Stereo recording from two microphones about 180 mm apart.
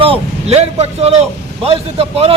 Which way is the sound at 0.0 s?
35° right (ahead or behind).